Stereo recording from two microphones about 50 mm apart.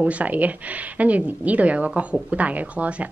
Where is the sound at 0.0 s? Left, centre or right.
Right.